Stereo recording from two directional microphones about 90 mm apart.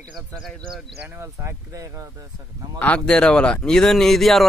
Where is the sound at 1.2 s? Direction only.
30° right (ahead or behind).